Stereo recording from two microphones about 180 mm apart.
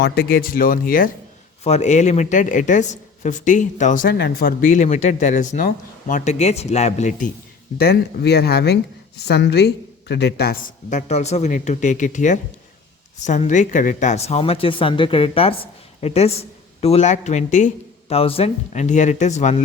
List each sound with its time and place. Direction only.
0.0 s a woman's voice: 60° left (ahead or behind)
1.6 s a woman's voice: 40° left (ahead or behind)
7.8 s speech: 60° left (ahead or behind)
10.8 s a woman's voice: 40° left (ahead or behind)